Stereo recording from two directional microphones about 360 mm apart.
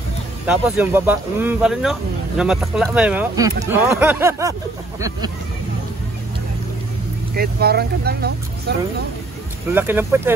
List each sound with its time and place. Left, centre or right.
0.5 s speech: centre
7.3 s speech: right
9.7 s speech: centre